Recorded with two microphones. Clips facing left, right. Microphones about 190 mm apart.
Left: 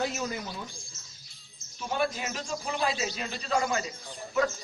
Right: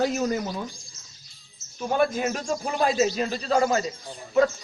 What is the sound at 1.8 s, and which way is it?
A man's voice, 45° right (ahead or behind).